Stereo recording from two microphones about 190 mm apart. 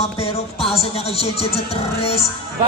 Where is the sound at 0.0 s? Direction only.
30° left (ahead or behind).